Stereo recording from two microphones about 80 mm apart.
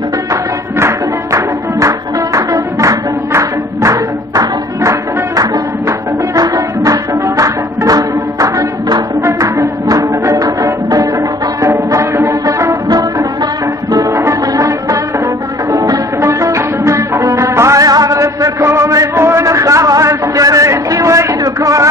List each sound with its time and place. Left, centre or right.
0.3 s music: right
16.2 s music: right
17.8 s a sound: right